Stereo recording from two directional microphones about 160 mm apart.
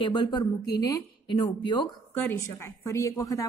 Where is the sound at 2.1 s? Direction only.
15° left (ahead or behind).